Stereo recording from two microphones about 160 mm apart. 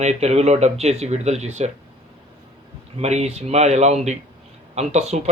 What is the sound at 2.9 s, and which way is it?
Speech, 45° right (ahead or behind).